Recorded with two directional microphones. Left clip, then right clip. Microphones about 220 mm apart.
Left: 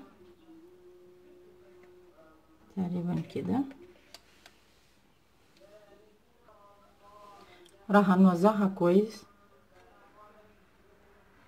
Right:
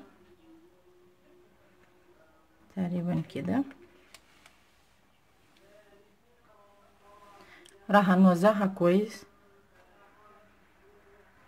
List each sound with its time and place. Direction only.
2.7 s speech: 50° right (ahead or behind)
7.6 s speech: 50° right (ahead or behind)